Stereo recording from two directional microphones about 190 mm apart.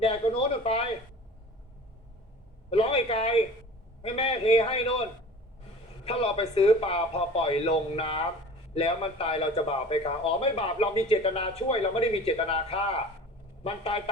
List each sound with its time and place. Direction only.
0.0 s speech: 30° left (ahead or behind)
2.6 s a sound: 30° left (ahead or behind)
4.0 s a man's voice: 30° left (ahead or behind)
6.1 s a man's voice: 30° left (ahead or behind)